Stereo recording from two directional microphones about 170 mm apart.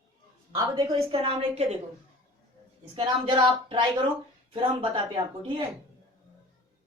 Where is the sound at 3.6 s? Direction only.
30° right (ahead or behind).